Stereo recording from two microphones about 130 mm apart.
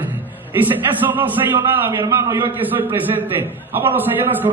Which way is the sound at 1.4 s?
30° right (ahead or behind).